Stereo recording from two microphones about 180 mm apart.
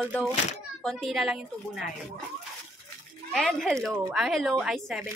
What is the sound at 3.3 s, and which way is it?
Speech, centre (ahead or behind).